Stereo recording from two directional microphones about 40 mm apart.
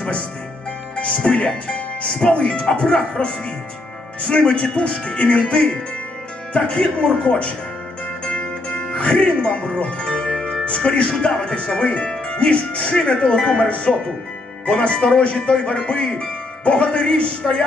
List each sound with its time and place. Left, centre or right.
0.9 s speech: left
8.3 s music: left
10.6 s speech: left